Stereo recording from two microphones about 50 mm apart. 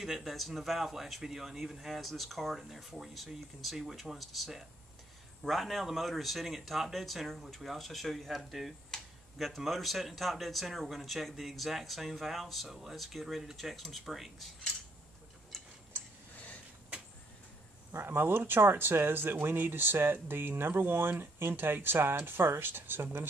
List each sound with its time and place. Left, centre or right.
0.0 s speech: centre
15.5 s tick-tock: centre
17.9 s speech: right